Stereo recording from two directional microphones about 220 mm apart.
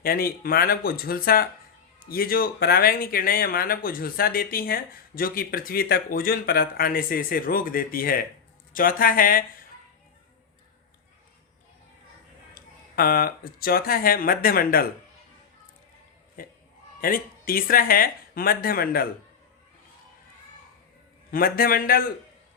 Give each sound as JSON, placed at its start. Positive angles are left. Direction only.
{"t": 0.0, "sound": "speech", "side_deg": 40}
{"t": 13.0, "sound": "speech", "side_deg": 45}
{"t": 16.4, "sound": "speech", "side_deg": 40}
{"t": 21.2, "sound": "speech", "side_deg": 40}